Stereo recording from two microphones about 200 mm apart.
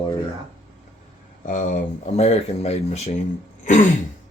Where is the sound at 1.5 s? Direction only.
40° left (ahead or behind).